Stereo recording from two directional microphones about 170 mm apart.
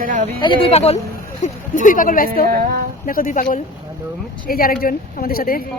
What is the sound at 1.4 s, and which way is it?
A woman's voice, 50° left (ahead or behind).